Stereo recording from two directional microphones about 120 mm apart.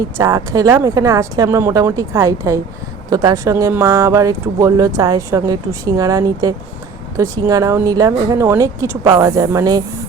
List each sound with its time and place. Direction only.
0.2 s speech: 30° right (ahead or behind)